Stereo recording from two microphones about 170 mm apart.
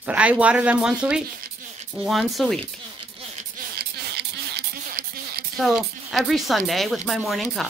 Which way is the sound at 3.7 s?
70° right (ahead or behind).